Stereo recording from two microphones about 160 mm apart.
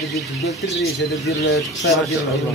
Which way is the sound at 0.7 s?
90° left.